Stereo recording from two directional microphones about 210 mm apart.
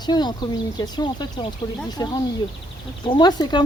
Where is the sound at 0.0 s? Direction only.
20° left (ahead or behind).